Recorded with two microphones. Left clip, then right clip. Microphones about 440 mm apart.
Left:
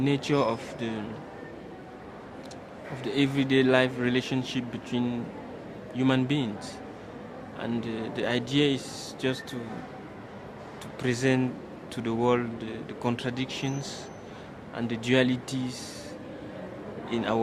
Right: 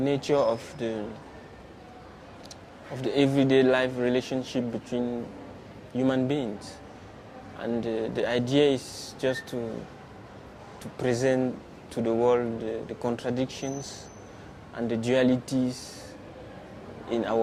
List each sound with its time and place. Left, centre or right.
0.0 s speech: right
3.0 s speech: right
7.6 s speech: right
10.9 s speech: right
14.8 s speech: right
17.1 s speech: right